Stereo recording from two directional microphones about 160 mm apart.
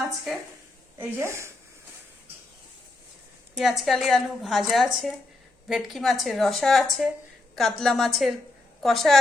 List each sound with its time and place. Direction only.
0.9 s speech: 15° right (ahead or behind)
3.6 s a woman's voice: centre (ahead or behind)